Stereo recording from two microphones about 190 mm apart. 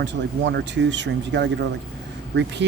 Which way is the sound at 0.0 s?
70° right (ahead or behind).